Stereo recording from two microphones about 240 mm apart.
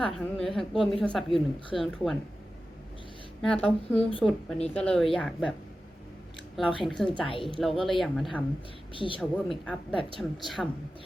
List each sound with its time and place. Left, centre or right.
0.0 s a woman's voice: centre
3.4 s a woman's voice: centre
6.8 s a woman's voice: centre
7.2 s a woman's voice: left
7.6 s a woman's voice: centre
9.0 s a woman's voice: left
9.5 s a woman's voice: centre